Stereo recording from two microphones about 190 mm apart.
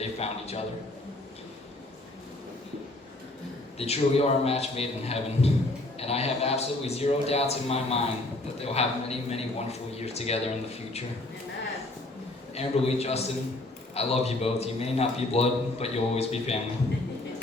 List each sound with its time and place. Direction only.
0.0 s a man's voice: 35° left (ahead or behind)
3.8 s a man's voice: 35° left (ahead or behind)
12.5 s a man's voice: 35° left (ahead or behind)